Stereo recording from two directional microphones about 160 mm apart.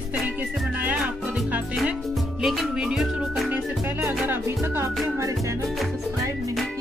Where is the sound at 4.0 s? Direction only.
15° right (ahead or behind).